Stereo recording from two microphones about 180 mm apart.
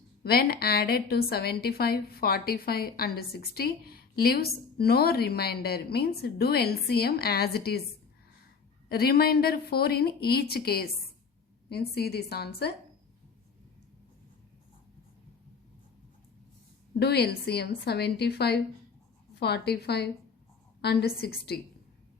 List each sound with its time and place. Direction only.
0.2 s a woman's voice: 60° left (ahead or behind)
8.9 s a woman's voice: 60° left (ahead or behind)
17.0 s a woman's voice: 65° left (ahead or behind)